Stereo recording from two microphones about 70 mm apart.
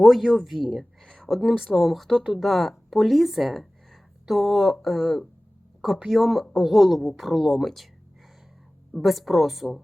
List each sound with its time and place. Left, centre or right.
0.0 s speech: centre
8.9 s speech: centre